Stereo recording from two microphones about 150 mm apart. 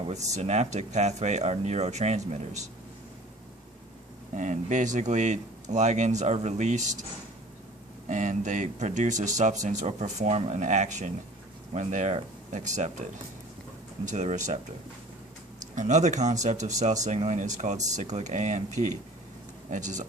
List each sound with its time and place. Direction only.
0.1 s speech: 50° right (ahead or behind)
4.4 s speech: 55° right (ahead or behind)
8.0 s speech: 55° right (ahead or behind)
15.7 s speech: 50° right (ahead or behind)